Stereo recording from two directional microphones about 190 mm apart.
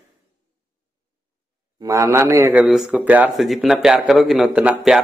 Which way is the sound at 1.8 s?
15° right (ahead or behind).